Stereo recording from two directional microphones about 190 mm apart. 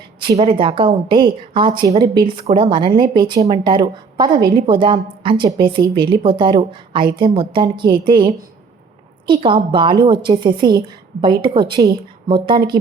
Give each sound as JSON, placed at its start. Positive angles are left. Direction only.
{"t": 0.3, "sound": "a woman's voice", "side_deg": -25}